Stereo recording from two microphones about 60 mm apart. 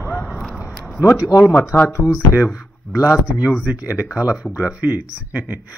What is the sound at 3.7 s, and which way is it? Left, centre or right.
Speech, right.